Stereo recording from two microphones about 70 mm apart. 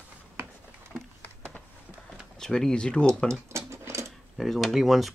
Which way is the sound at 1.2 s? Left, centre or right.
Left.